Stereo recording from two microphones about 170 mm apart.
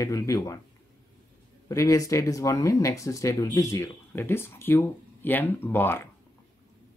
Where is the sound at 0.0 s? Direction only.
20° left (ahead or behind).